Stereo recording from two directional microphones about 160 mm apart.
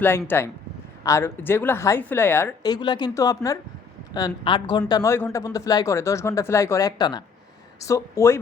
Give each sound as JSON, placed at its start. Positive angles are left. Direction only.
{"t": 0.3, "sound": "a woman's voice", "side_deg": 15}
{"t": 2.6, "sound": "a woman's voice", "side_deg": 25}